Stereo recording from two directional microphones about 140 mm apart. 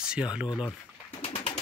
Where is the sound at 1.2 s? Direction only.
45° left (ahead or behind).